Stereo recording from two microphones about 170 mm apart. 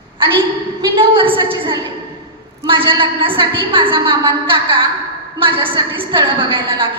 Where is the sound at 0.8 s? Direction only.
30° right (ahead or behind).